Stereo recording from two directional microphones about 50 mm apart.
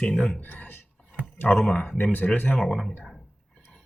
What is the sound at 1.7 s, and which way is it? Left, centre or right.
Speech, left.